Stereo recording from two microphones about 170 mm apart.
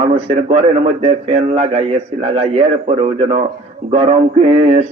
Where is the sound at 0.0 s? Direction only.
35° right (ahead or behind).